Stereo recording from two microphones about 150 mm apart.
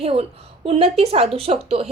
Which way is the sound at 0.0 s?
40° right (ahead or behind).